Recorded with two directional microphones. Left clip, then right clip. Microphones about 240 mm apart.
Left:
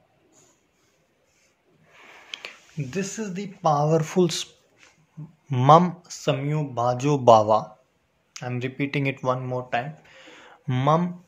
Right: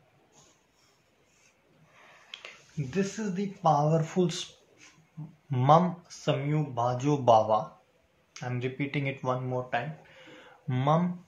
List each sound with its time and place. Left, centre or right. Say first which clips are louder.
2.2 s speech: left 7 dB; left
5.5 s speech: left 6 dB; left